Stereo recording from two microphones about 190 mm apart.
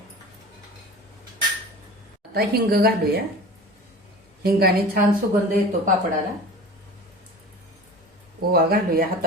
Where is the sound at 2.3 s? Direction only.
55° right (ahead or behind).